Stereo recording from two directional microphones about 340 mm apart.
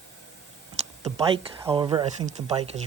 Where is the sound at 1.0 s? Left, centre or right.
Centre.